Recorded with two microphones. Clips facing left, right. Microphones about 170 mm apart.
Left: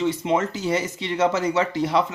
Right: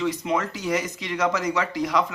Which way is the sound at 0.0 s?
25° left (ahead or behind).